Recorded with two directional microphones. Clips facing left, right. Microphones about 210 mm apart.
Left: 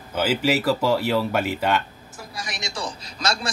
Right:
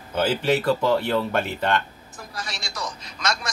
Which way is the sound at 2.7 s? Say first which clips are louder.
Left 2 dB; 30° left (ahead or behind).